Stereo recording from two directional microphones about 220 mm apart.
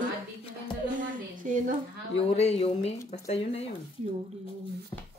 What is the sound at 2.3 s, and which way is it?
Speech, 30° left (ahead or behind).